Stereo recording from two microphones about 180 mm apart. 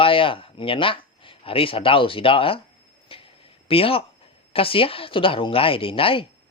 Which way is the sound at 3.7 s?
30° left (ahead or behind).